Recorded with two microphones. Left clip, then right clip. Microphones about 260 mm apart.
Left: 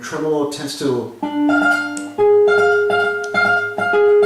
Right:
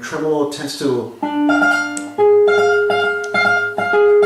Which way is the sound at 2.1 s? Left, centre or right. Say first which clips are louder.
Right 1 dB; centre.